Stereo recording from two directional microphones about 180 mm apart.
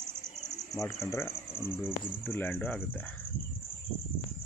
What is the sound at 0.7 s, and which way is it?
Speech, 15° left (ahead or behind).